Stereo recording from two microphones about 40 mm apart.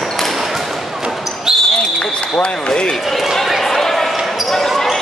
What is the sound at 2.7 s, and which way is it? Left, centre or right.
Speech, centre.